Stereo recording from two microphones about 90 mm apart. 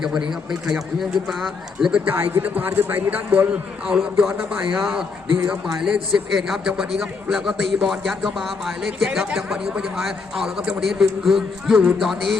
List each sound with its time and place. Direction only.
0.0 s a man's voice: 5° right (ahead or behind)
2.0 s a man's voice: 20° right (ahead or behind); by 12.4 s centre (ahead or behind)